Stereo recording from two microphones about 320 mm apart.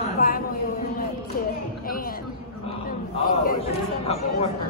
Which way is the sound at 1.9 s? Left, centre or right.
Left.